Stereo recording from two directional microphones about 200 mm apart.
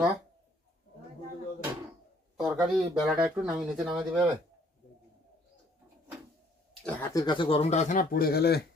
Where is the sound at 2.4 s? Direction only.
Centre (ahead or behind).